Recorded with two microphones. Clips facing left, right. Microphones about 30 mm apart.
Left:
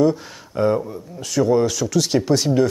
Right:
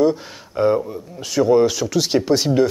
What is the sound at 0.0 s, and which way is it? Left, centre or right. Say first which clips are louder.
Speech: even; centre.